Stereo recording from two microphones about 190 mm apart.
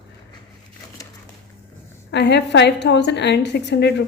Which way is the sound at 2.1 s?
65° left (ahead or behind).